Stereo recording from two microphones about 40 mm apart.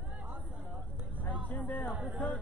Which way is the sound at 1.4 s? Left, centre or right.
Left.